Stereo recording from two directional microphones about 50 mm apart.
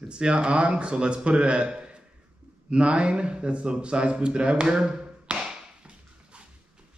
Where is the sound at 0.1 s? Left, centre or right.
Centre.